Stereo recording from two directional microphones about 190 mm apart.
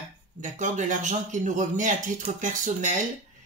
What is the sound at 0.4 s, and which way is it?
Speech, 40° right (ahead or behind).